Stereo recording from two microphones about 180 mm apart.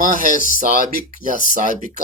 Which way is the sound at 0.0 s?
50° right (ahead or behind).